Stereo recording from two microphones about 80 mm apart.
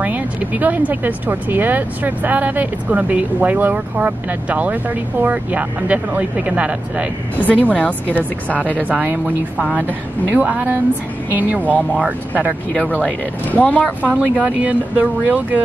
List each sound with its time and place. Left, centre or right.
0.0 s speech: centre
7.3 s speech: centre
8.2 s speech: centre
12.7 s speech: centre
14.0 s speech: centre